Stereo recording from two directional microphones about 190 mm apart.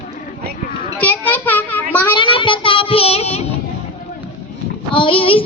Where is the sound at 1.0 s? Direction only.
10° left (ahead or behind).